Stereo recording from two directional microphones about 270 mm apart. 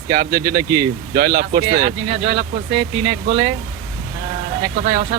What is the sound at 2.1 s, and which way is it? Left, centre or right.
Speech, right.